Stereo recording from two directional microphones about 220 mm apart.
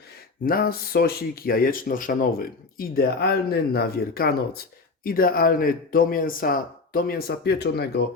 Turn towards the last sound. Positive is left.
turn(degrees=45)  # may be behind; listen again after turning